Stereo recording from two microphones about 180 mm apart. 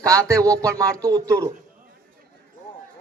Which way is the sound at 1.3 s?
15° right (ahead or behind).